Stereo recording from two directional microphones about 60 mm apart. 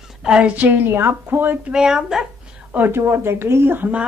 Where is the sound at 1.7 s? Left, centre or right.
Centre.